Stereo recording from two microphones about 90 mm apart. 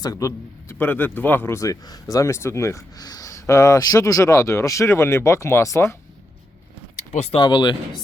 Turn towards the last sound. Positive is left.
turn(degrees=60)  # may be behind; listen again after turning